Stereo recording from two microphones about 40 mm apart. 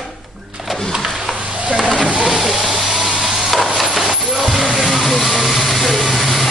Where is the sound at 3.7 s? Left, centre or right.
Centre.